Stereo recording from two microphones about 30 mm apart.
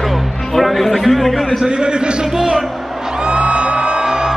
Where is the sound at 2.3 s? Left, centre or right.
Centre.